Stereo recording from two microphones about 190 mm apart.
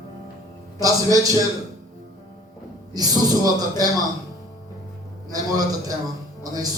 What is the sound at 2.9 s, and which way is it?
Speech, 20° right (ahead or behind).